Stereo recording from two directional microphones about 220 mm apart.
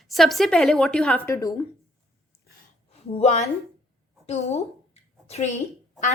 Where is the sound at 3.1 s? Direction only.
30° left (ahead or behind).